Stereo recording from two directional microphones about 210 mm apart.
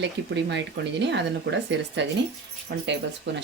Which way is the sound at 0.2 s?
60° right (ahead or behind).